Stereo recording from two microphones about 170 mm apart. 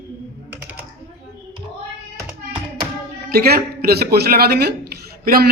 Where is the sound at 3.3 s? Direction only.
65° right (ahead or behind).